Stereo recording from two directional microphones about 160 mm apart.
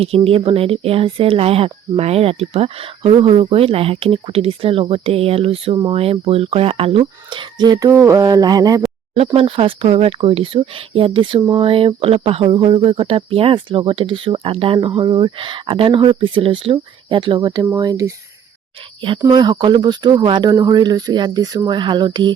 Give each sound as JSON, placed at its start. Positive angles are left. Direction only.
{"t": 0.0, "sound": "speech", "side_deg": -35}
{"t": 9.1, "sound": "speech", "side_deg": -35}
{"t": 19.3, "sound": "speech", "side_deg": -25}